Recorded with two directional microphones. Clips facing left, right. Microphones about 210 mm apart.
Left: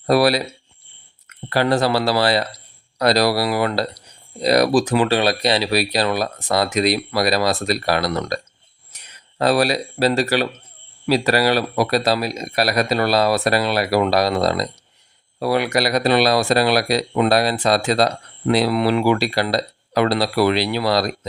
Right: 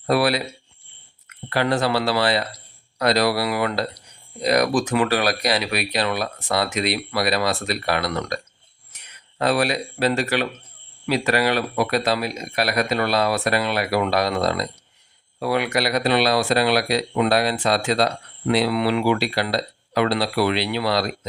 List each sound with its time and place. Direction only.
0.1 s speech: 40° left (ahead or behind)
1.5 s speech: 40° left (ahead or behind)
8.9 s a sound: 35° left (ahead or behind)
9.4 s speech: 40° left (ahead or behind)